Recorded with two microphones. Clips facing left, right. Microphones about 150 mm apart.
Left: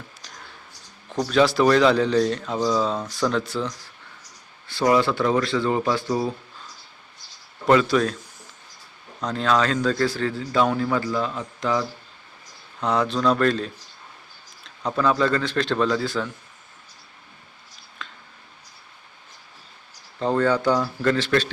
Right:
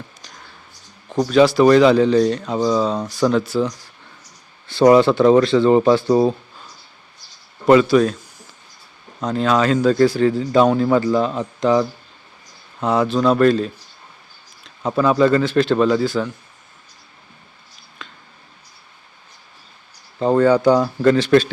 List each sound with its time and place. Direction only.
1.3 s speech: centre (ahead or behind)
4.7 s speech: 25° right (ahead or behind)
7.7 s speech: 5° right (ahead or behind)
9.2 s a man's voice: 5° right (ahead or behind); by 11.9 s 25° right (ahead or behind)
12.8 s a man's voice: 5° right (ahead or behind)
18.0 s a sound: centre (ahead or behind)
20.1 s a man's voice: 10° right (ahead or behind)